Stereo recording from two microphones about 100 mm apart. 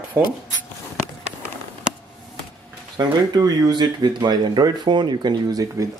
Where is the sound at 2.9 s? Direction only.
45° right (ahead or behind).